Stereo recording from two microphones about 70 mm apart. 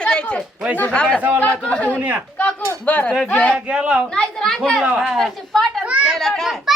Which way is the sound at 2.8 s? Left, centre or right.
Centre.